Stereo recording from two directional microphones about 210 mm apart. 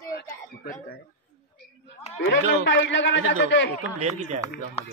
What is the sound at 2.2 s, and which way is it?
A man's voice, 60° left (ahead or behind).